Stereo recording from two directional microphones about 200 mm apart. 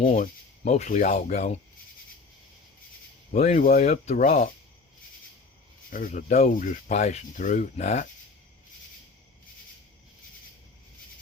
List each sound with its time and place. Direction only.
0.0 s speech: 40° left (ahead or behind)
3.3 s speech: 35° left (ahead or behind)
5.9 s speech: 40° left (ahead or behind)